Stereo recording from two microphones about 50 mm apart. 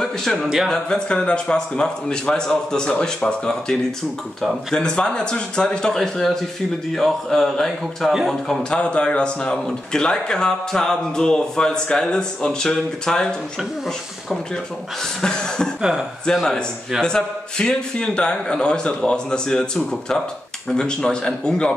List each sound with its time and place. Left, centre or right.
0.0 s speech: centre
4.7 s speech: centre
5.9 s a man's voice: centre
8.6 s speech: left
15.2 s speech: centre
15.8 s speech: centre
17.0 s speech: centre